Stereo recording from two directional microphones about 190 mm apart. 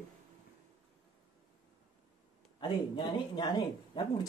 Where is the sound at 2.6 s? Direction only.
25° left (ahead or behind).